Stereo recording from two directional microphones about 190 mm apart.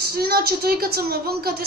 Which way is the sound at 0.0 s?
55° right (ahead or behind).